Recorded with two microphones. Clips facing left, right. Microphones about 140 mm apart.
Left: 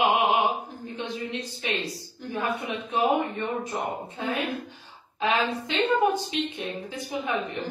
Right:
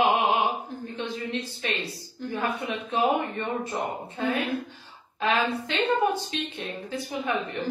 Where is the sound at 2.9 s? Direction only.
15° left (ahead or behind).